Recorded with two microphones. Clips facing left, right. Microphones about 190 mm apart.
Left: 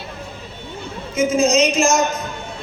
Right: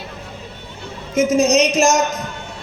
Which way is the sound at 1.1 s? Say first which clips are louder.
Right 2 dB; 70° right (ahead or behind).